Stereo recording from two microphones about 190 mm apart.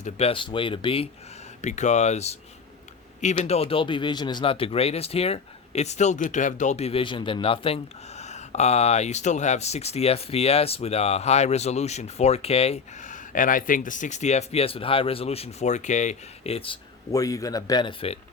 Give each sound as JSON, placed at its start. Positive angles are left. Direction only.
{"t": 0.0, "sound": "speech", "side_deg": 30}
{"t": 17.1, "sound": "speech", "side_deg": 20}